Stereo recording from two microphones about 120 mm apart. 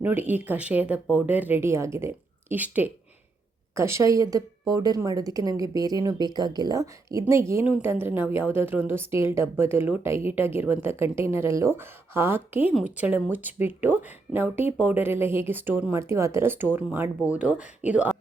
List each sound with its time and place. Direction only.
0.0 s a woman's voice: 15° right (ahead or behind)